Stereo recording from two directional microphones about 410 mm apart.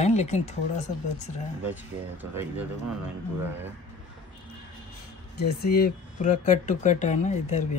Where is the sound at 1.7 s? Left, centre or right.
Centre.